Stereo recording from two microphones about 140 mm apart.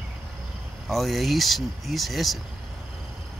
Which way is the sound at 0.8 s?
Centre (ahead or behind).